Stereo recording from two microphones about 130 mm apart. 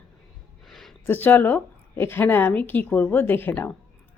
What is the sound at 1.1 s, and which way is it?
A woman's voice, 15° left (ahead or behind).